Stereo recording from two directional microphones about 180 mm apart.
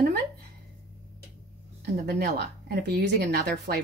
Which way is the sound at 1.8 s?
65° right (ahead or behind).